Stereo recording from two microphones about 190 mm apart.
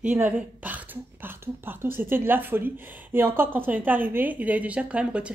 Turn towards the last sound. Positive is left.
turn(degrees=-5)  # may be behind; listen again after turning